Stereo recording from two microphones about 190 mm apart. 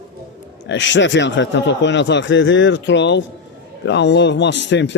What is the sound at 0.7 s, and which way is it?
Speech, 75° left (ahead or behind).